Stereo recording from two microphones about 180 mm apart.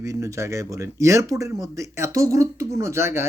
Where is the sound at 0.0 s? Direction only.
15° right (ahead or behind).